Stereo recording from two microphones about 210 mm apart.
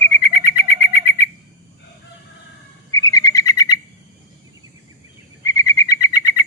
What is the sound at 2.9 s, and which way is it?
Bird, 15° left (ahead or behind).